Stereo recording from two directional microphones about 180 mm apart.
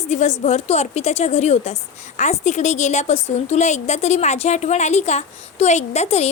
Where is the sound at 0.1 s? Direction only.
40° left (ahead or behind).